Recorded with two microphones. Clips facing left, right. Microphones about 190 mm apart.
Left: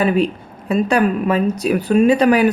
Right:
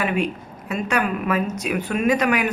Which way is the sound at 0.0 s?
35° left (ahead or behind).